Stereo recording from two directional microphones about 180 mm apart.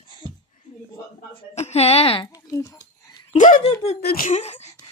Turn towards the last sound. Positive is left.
turn(degrees=40)  # may be behind; listen again after turning